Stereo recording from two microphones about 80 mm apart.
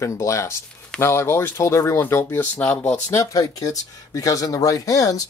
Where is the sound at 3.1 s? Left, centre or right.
Left.